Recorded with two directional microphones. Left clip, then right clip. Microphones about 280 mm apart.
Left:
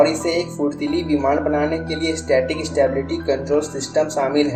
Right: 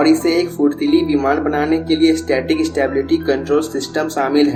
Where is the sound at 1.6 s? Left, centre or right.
Right.